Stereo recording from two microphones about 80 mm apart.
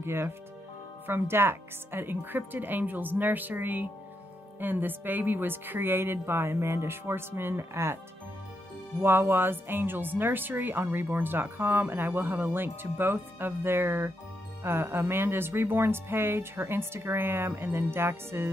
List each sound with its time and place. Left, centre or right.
0.0 s speech: right
9.0 s speech: right